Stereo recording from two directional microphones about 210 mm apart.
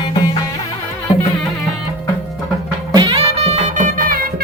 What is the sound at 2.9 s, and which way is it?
Music, 20° right (ahead or behind).